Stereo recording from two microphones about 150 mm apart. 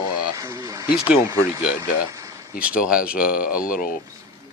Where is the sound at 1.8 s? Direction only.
20° right (ahead or behind).